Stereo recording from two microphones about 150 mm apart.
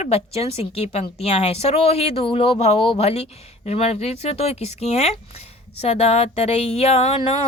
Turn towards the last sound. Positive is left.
turn(degrees=45)  # may be behind; listen again after turning